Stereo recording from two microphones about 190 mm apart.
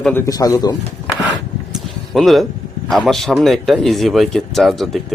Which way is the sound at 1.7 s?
Centre (ahead or behind).